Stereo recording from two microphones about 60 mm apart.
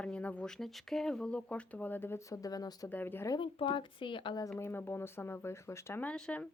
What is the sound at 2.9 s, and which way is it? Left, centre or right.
Speech, left.